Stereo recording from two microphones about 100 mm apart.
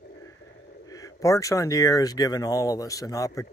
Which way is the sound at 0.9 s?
35° left (ahead or behind).